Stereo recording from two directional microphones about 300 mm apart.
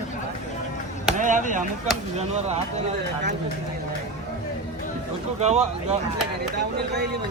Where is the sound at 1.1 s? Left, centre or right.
Right.